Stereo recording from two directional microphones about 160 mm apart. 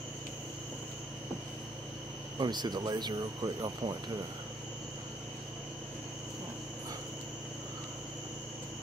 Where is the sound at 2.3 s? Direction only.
25° right (ahead or behind).